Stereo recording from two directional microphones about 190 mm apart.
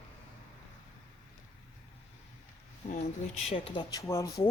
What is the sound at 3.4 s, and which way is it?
Speech, 30° left (ahead or behind).